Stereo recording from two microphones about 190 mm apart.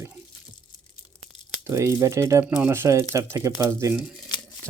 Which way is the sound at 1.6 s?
15° right (ahead or behind).